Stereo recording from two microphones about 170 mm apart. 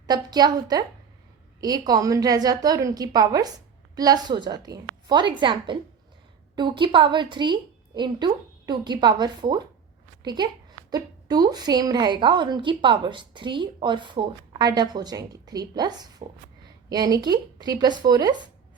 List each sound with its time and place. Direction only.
0.1 s a woman's voice: 25° right (ahead or behind)